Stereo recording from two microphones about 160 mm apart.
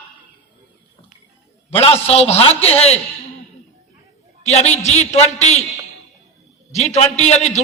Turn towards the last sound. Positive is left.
turn(degrees=45)  # may be behind; listen again after turning